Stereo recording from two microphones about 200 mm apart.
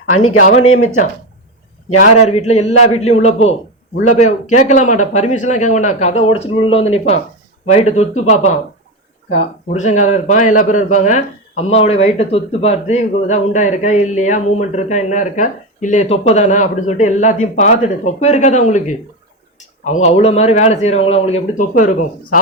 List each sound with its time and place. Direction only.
0.1 s speech: 90° left
0.3 s speech: 40° left (ahead or behind)
2.0 s speech: 35° left (ahead or behind)
3.9 s a man's voice: 90° left
4.2 s speech: 35° left (ahead or behind)